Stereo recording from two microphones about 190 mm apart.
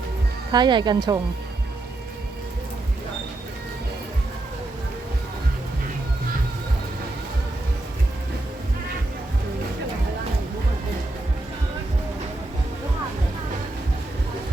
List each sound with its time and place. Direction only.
0.5 s speech: 25° right (ahead or behind)